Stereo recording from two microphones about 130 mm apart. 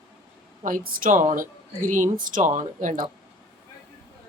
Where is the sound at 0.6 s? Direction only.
90° right.